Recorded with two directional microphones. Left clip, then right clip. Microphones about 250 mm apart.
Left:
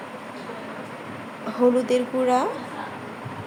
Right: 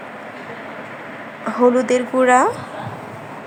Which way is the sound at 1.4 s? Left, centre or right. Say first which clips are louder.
Right 5 dB; centre.